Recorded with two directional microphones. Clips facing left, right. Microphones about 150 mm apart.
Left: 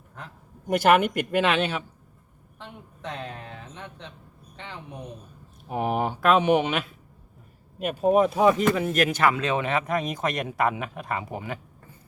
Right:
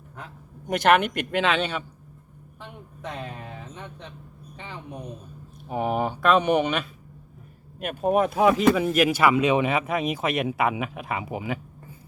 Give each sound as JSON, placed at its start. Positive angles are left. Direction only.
{"t": 0.7, "sound": "speech", "side_deg": 5}
{"t": 2.6, "sound": "a sound", "side_deg": -10}
{"t": 4.5, "sound": "speech", "side_deg": -10}
{"t": 5.6, "sound": "speech", "side_deg": 0}
{"t": 8.0, "sound": "speech", "side_deg": 0}